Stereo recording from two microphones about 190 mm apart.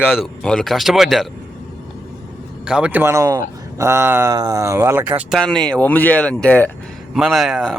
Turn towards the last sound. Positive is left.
turn(degrees=0)  # may be behind; listen again after turning